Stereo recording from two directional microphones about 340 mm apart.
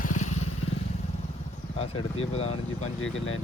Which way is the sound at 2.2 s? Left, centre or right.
Centre.